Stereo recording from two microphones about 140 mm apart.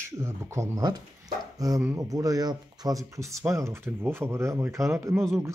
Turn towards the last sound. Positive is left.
turn(degrees=-15)  # may be behind; listen again after turning